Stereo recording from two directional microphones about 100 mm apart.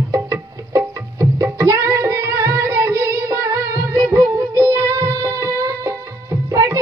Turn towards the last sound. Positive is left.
turn(degrees=-30)  # may be behind; listen again after turning